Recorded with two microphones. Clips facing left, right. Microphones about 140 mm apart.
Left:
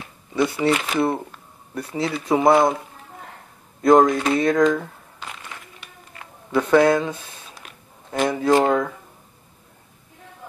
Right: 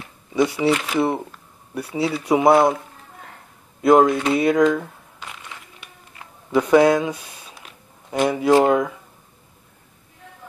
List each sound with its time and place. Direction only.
0.3 s speech: 10° right (ahead or behind)
3.8 s speech: 5° right (ahead or behind)
6.1 s speech: 15° right (ahead or behind)
7.6 s a sound: 20° right (ahead or behind)
8.1 s speech: 10° right (ahead or behind)